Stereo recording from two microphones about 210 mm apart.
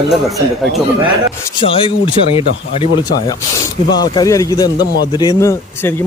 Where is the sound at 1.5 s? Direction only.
25° left (ahead or behind).